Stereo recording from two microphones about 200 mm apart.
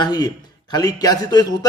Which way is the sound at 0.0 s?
20° left (ahead or behind).